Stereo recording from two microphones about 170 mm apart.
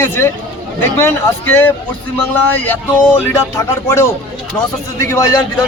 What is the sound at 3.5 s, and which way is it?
A man's voice, 15° left (ahead or behind).